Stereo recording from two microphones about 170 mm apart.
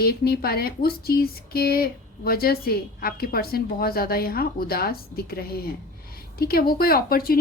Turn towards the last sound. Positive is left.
turn(degrees=60)  # may be behind; listen again after turning